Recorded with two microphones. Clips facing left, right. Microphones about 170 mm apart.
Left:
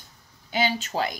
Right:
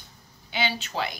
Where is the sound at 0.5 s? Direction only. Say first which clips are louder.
Left 4 dB; 45° left (ahead or behind).